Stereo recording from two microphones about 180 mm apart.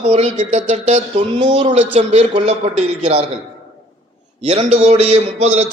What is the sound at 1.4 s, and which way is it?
A man's voice, 25° right (ahead or behind).